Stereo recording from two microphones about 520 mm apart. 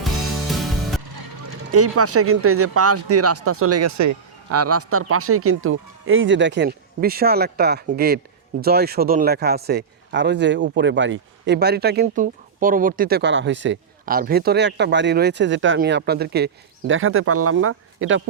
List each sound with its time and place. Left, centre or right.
0.5 s music: centre
1.5 s speech: right